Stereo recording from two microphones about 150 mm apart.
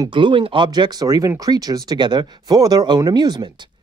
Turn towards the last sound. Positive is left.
turn(degrees=-30)  # may be behind; listen again after turning